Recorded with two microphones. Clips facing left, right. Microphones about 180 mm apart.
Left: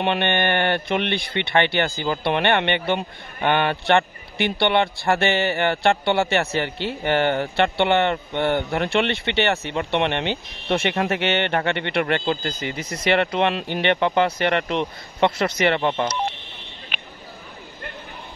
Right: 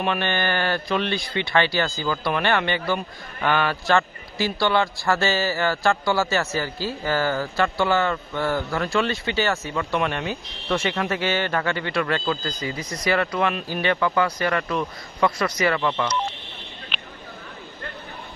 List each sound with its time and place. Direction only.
0.0 s speech: 25° left (ahead or behind)